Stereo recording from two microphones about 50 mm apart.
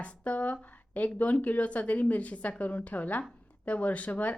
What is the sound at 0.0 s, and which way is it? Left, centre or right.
A woman's voice, left.